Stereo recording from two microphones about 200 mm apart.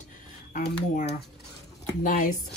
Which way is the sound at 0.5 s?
40° left (ahead or behind).